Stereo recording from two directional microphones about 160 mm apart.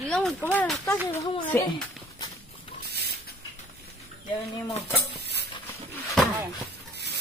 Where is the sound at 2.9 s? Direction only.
85° right.